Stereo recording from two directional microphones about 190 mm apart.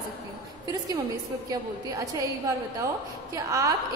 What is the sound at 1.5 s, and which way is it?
Speech, 20° right (ahead or behind).